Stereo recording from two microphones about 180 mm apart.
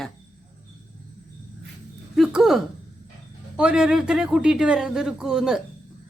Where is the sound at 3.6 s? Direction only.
5° right (ahead or behind).